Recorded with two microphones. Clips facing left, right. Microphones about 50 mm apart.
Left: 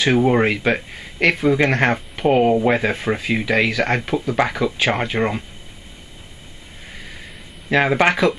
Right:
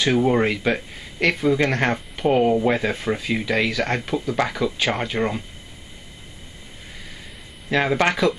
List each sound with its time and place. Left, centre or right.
0.0 s speech: left
7.7 s speech: left